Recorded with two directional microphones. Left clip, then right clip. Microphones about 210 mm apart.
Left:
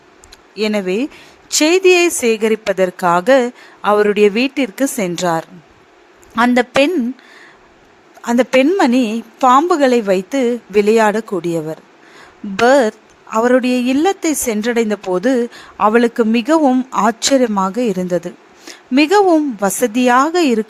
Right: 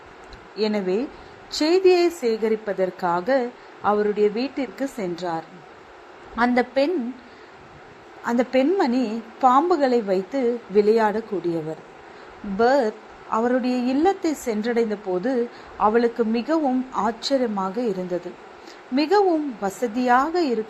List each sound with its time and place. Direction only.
0.6 s a woman's voice: 40° left (ahead or behind)
8.2 s a woman's voice: 40° left (ahead or behind)
12.6 s a woman's voice: 40° left (ahead or behind)